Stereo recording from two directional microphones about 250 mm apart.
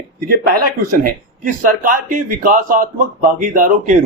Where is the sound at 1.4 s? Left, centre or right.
Right.